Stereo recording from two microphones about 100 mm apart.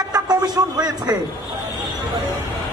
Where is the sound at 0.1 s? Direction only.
40° right (ahead or behind).